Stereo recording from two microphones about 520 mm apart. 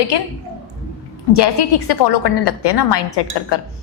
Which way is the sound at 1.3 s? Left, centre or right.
Left.